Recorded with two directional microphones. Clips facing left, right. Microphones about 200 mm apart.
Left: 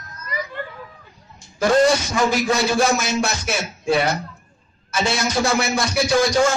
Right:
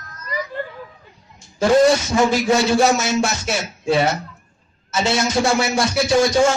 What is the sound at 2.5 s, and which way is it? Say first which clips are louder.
A man's voice: right 3 dB; 25° right (ahead or behind).